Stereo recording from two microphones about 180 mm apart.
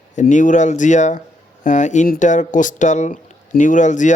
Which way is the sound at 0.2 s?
45° left (ahead or behind).